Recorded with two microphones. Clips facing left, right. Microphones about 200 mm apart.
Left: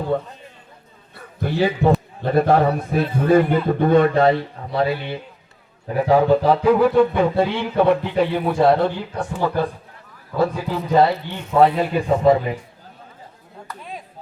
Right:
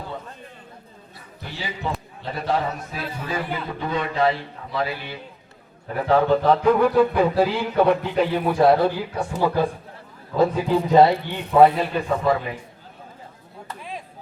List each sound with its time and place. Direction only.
0.1 s a man's voice: 55° left (ahead or behind)
4.7 s speech: 30° left (ahead or behind)
5.9 s a sound: 15° left (ahead or behind); by 9.2 s 5° right (ahead or behind)
9.4 s speech: 10° right (ahead or behind)
11.9 s speech: 20° left (ahead or behind)